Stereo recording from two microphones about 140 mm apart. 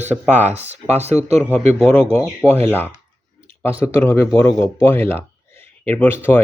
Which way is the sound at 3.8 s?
20° left (ahead or behind).